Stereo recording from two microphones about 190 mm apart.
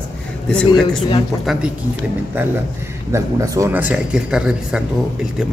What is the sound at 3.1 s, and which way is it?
A man's voice, 15° right (ahead or behind).